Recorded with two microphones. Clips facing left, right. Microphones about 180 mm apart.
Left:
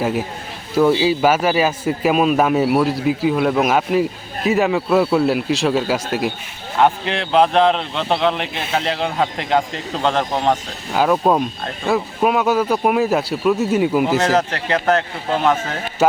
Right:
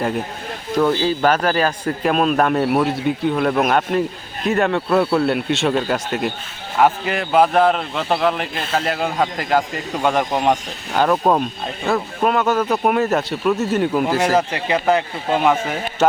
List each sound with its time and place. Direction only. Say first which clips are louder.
0.0 s a man's voice: left 1 dB; 5° left (ahead or behind); by 10.6 s 10° right (ahead or behind)
10.9 s a man's voice: left 1 dB; 5° left (ahead or behind)
11.3 s a man's voice: left 1 dB; 5° right (ahead or behind)
11.9 s a man's voice: left 1 dB; 5° left (ahead or behind)
14.2 s speech: even; 10° right (ahead or behind)